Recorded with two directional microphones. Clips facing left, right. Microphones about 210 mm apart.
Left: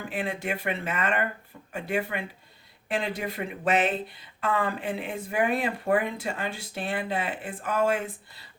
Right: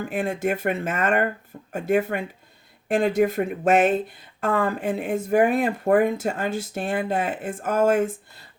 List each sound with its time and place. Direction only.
0.0 s speech: 45° right (ahead or behind)